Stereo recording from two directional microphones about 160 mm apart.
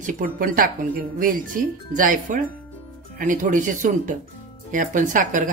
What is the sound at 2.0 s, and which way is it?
Speech, 55° right (ahead or behind).